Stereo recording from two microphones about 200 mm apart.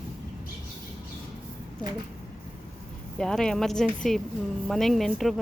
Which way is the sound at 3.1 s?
5° left (ahead or behind).